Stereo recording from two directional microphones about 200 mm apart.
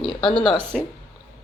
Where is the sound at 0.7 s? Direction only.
Centre (ahead or behind).